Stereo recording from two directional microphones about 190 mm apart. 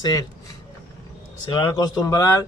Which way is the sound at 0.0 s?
20° left (ahead or behind).